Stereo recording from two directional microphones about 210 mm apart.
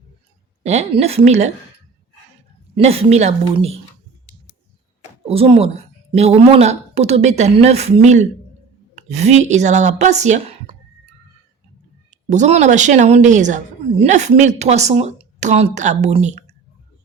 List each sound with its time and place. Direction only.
0.6 s a woman's voice: 30° right (ahead or behind)
2.7 s a woman's voice: 30° right (ahead or behind)
5.3 s a woman's voice: 30° right (ahead or behind)
12.3 s a woman's voice: 35° right (ahead or behind)